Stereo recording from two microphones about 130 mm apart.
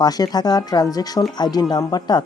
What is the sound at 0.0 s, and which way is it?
Speech, 30° left (ahead or behind).